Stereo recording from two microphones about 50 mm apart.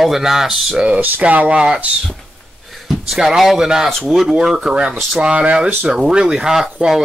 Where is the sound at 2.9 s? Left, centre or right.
Centre.